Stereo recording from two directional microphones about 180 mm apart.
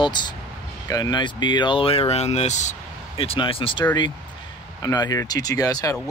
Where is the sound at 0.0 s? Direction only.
25° left (ahead or behind).